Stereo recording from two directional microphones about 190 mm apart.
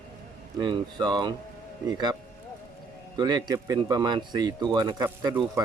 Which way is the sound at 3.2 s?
20° right (ahead or behind).